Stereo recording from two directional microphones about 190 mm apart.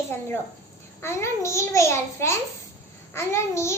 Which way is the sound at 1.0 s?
15° left (ahead or behind).